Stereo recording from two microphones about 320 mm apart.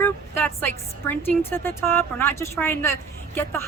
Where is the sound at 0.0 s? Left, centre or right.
Centre.